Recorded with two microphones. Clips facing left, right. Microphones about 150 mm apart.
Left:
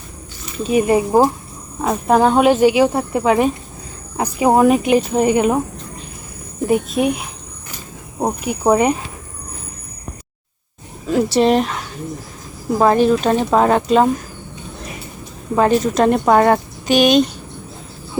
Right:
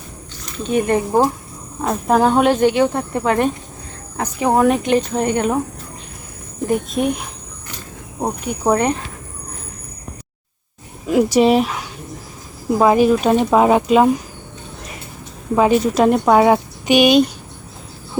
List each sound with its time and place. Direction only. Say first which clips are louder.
0.4 s speech: left 2 dB; 5° left (ahead or behind)
6.7 s speech: left 2 dB; 5° left (ahead or behind)
11.0 s speech: right 1 dB; 10° right (ahead or behind)
15.5 s speech: even; 5° right (ahead or behind)